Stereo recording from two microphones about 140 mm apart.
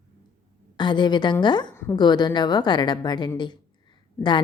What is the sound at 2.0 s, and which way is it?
A woman's voice, 30° left (ahead or behind).